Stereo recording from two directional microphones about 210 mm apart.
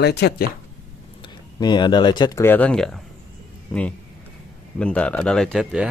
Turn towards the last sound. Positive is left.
turn(degrees=0)  # may be behind; listen again after turning